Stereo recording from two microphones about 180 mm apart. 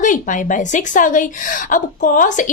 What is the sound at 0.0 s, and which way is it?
A woman's voice, 45° left (ahead or behind).